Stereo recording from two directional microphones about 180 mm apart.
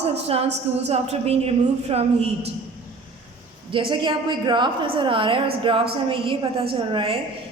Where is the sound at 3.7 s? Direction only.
25° right (ahead or behind).